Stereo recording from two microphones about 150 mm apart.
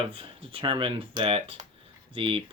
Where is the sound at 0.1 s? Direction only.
35° right (ahead or behind).